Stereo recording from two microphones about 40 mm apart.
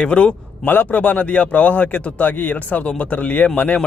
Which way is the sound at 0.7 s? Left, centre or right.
Left.